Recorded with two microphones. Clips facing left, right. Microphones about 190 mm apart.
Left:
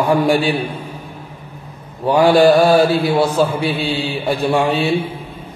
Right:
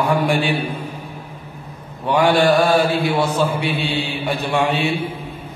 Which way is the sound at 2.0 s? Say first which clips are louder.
Left 4 dB; 35° left (ahead or behind).